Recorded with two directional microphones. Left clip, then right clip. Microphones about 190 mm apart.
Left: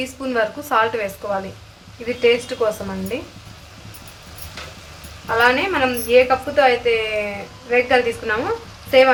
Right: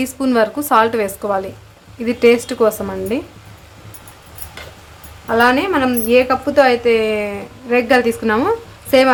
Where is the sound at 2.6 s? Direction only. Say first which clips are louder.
Right 7 dB; 50° right (ahead or behind).